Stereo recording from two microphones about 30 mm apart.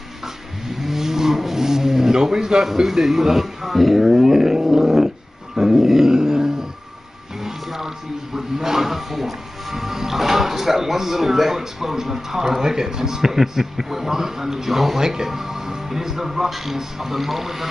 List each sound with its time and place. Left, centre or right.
0.7 s a sound: centre
2.7 s speech: centre
5.6 s dog: centre
7.3 s music: centre
8.4 s speech: centre
15.0 s speech: right